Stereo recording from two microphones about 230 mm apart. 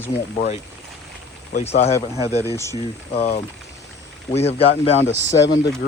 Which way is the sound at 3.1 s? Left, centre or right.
Left.